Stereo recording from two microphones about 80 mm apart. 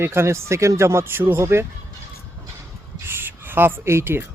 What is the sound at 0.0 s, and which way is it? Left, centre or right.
Speech, right.